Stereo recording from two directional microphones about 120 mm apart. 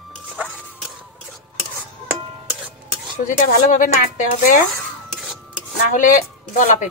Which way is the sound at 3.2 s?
90° left.